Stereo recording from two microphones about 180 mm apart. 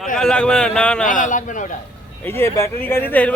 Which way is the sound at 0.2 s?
5° left (ahead or behind).